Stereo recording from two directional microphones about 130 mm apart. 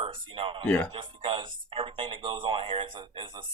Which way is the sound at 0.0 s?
40° right (ahead or behind).